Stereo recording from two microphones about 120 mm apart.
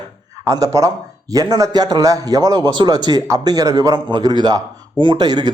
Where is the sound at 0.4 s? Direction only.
30° right (ahead or behind).